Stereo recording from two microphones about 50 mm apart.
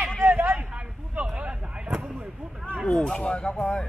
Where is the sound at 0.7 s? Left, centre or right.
Right.